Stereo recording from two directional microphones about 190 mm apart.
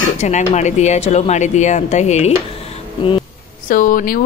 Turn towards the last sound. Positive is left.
turn(degrees=50)  # may be behind; listen again after turning